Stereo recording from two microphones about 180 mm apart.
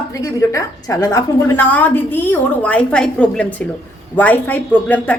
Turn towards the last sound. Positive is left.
turn(degrees=10)  # may be behind; listen again after turning